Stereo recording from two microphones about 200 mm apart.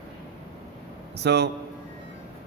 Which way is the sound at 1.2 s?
55° right (ahead or behind).